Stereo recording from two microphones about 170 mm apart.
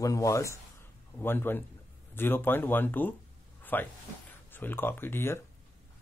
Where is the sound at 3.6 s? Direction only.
10° left (ahead or behind).